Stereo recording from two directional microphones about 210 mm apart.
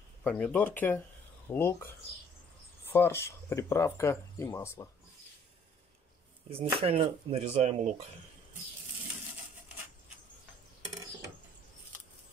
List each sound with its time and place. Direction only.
0.2 s speech: 5° left (ahead or behind)
2.9 s speech: 10° left (ahead or behind)
6.5 s speech: 30° right (ahead or behind)